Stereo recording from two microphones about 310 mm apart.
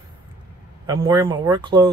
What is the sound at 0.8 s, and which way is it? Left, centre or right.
Speech, centre.